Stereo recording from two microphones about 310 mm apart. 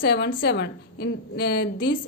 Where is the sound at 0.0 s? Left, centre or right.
Left.